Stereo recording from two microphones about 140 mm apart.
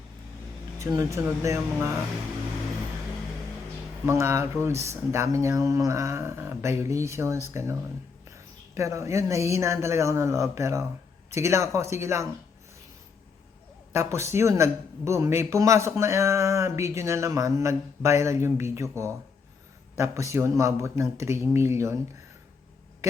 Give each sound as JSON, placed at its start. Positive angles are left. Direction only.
{"t": 0.8, "sound": "speech", "side_deg": -20}
{"t": 4.0, "sound": "speech", "side_deg": -20}
{"t": 13.9, "sound": "speech", "side_deg": -20}